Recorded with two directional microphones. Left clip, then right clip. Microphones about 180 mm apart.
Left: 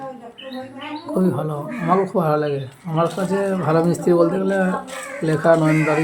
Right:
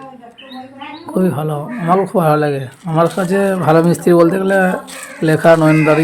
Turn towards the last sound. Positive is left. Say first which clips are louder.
# right 6 dB
turn(degrees=-40)  # may be behind; listen again after turning